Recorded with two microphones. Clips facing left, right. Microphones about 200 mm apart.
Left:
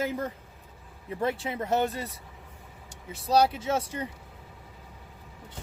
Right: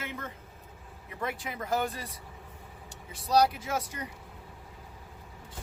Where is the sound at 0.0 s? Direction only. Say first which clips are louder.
Left 9 dB; 35° left (ahead or behind).